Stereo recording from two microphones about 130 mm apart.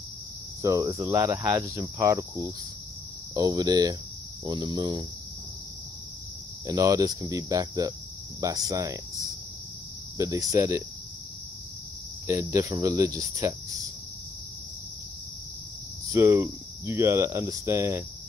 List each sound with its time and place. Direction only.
0.6 s speech: 25° right (ahead or behind)
6.6 s speech: 25° right (ahead or behind)
12.3 s speech: 20° right (ahead or behind)
16.1 s speech: 20° right (ahead or behind)